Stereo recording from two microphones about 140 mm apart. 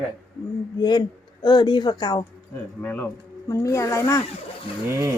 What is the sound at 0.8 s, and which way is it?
A woman's voice, 30° left (ahead or behind).